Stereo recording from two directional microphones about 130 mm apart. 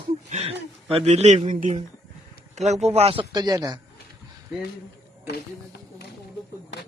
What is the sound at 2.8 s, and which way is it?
Speech, 50° right (ahead or behind).